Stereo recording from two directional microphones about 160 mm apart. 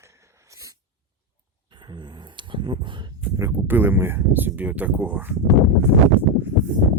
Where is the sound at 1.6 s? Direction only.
30° right (ahead or behind).